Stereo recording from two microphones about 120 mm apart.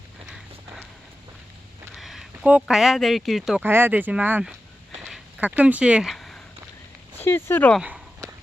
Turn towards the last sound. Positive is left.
turn(degrees=15)  # may be behind; listen again after turning